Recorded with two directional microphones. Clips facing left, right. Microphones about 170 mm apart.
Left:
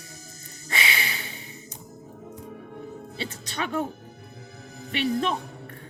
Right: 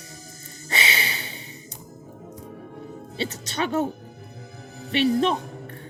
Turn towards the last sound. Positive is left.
turn(degrees=-30)  # may be behind; listen again after turning